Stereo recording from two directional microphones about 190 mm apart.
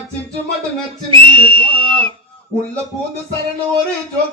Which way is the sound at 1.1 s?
25° right (ahead or behind).